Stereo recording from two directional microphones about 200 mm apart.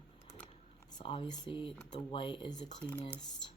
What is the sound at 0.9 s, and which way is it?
Speech, 25° left (ahead or behind).